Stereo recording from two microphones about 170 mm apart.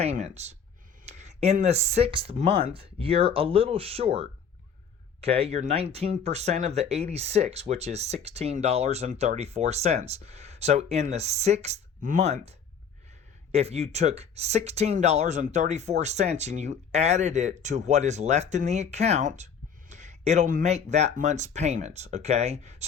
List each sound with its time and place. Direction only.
0.0 s speech: 40° right (ahead or behind)